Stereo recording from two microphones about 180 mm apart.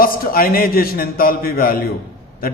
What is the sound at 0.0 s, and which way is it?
A man's voice, 55° left (ahead or behind).